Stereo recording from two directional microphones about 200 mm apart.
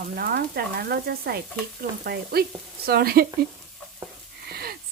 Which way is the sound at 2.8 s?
50° right (ahead or behind).